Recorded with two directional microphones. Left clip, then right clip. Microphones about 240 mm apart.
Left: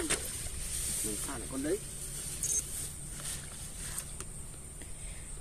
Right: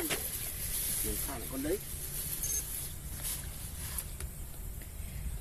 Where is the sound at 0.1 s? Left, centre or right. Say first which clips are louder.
Left 1 dB; centre.